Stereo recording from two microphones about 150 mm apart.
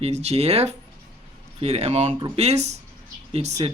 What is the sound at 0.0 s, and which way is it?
Speech, 45° right (ahead or behind).